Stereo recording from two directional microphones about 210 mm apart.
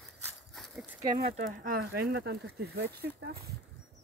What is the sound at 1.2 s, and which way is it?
Speech, 40° right (ahead or behind).